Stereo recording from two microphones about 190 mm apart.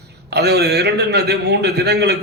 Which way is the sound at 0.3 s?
60° right (ahead or behind).